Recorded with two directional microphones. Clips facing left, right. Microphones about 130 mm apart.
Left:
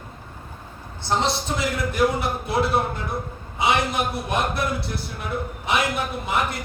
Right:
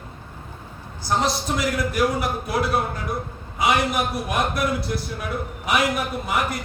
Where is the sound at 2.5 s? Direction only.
25° left (ahead or behind).